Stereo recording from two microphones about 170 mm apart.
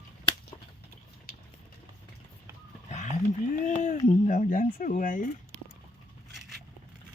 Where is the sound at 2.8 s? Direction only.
45° left (ahead or behind).